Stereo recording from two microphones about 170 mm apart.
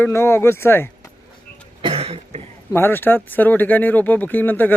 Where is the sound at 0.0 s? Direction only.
15° left (ahead or behind).